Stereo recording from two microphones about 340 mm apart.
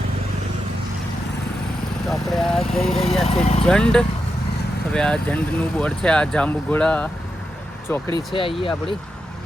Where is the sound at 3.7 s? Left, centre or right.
Centre.